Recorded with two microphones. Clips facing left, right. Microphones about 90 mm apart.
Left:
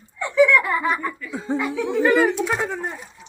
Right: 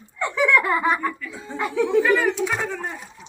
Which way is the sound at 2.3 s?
5° left (ahead or behind).